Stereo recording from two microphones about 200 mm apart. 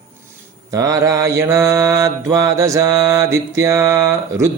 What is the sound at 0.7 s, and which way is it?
Mantra, 15° right (ahead or behind).